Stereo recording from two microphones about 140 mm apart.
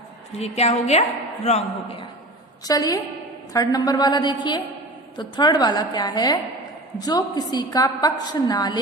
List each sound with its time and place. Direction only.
0.3 s a woman's voice: 50° left (ahead or behind)
2.6 s a woman's voice: 25° left (ahead or behind)